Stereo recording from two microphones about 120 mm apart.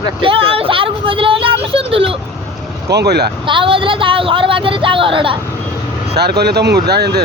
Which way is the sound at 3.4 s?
45° right (ahead or behind).